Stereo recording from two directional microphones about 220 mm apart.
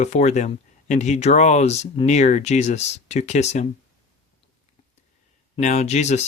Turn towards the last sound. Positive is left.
turn(degrees=30)  # may be behind; listen again after turning